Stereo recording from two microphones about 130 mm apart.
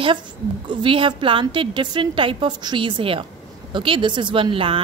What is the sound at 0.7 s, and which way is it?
A woman's voice, 40° right (ahead or behind).